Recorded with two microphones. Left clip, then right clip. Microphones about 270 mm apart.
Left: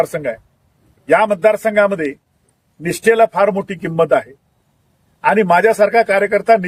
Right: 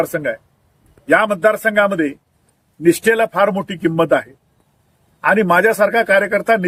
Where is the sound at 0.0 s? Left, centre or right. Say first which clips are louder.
Left 1 dB; centre.